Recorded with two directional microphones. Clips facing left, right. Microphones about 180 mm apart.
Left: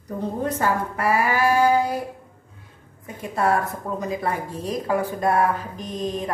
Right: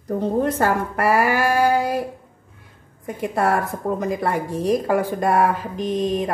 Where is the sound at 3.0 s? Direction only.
60° right (ahead or behind).